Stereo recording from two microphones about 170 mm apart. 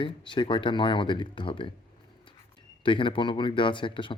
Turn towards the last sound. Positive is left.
turn(degrees=30)  # may be behind; listen again after turning